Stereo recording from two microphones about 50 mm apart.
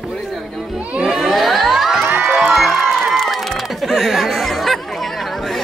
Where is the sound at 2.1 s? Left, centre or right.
Right.